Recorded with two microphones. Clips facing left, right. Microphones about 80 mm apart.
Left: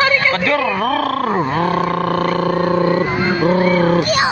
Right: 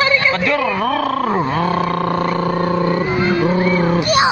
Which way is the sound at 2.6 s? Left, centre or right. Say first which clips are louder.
Left 2 dB; left.